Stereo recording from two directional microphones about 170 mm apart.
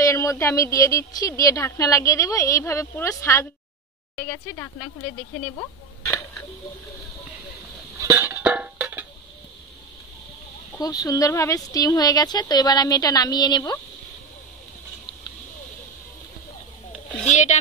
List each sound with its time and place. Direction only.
0.0 s a woman's voice: 20° left (ahead or behind)
8.0 s music: 15° right (ahead or behind)
10.8 s a woman's voice: 20° left (ahead or behind)
17.2 s speech: 45° left (ahead or behind)